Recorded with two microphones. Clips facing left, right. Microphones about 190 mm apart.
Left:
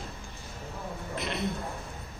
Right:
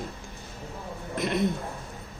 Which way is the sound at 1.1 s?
50° right (ahead or behind).